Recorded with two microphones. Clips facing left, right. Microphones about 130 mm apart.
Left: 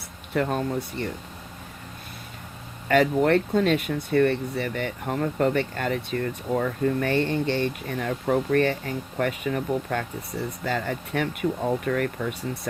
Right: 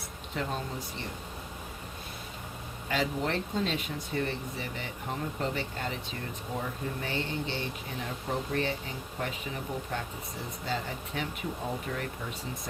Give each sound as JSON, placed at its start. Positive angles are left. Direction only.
{"t": 0.3, "sound": "speech", "side_deg": 60}
{"t": 2.9, "sound": "speech", "side_deg": 60}